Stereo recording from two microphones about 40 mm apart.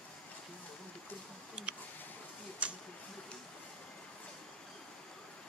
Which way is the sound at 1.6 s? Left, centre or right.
Right.